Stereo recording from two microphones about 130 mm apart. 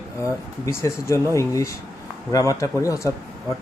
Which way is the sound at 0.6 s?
25° left (ahead or behind).